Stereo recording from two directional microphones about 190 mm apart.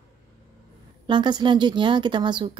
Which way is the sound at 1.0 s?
25° right (ahead or behind).